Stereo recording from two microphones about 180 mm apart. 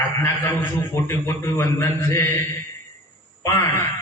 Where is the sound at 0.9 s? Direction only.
15° left (ahead or behind).